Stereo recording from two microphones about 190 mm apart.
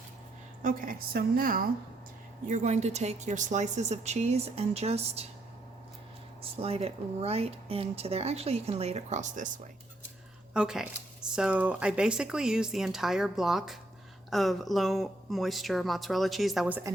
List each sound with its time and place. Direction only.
0.6 s a woman's voice: 45° right (ahead or behind)
2.5 s speech: 40° right (ahead or behind)
6.6 s speech: 30° right (ahead or behind)
10.5 s speech: 5° right (ahead or behind)